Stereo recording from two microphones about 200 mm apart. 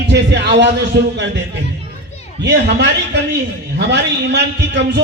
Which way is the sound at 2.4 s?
60° right (ahead or behind).